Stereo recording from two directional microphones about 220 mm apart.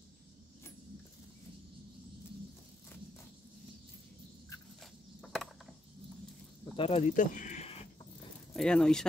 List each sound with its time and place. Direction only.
5.2 s a sound: centre (ahead or behind)
6.8 s speech: 25° left (ahead or behind)
8.5 s speech: 5° left (ahead or behind)